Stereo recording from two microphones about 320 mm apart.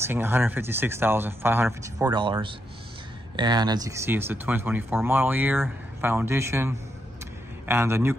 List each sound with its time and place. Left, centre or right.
0.0 s speech: centre